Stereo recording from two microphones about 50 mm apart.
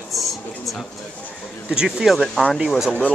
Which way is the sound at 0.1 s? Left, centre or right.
Centre.